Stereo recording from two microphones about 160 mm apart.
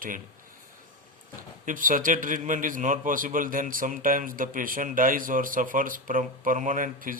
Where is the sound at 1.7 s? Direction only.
55° right (ahead or behind).